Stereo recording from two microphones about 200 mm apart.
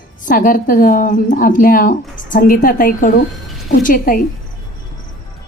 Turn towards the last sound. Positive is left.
turn(degrees=45)  # may be behind; listen again after turning